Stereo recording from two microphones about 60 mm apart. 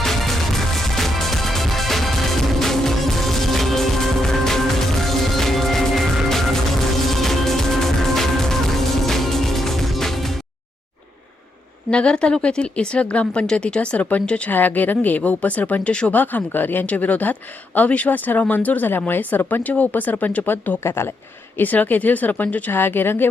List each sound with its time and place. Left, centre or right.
0.0 s music: centre
11.9 s speech: centre
16.1 s speech: left
20.5 s speech: left
21.6 s speech: left
22.7 s speech: left